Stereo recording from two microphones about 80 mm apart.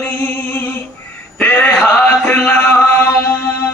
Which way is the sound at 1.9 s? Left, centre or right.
Left.